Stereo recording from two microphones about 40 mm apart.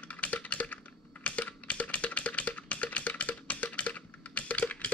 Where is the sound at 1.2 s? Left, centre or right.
Left.